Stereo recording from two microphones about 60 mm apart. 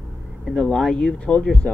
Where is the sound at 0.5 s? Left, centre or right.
Centre.